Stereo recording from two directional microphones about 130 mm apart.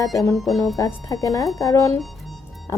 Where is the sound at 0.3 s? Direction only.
Centre (ahead or behind).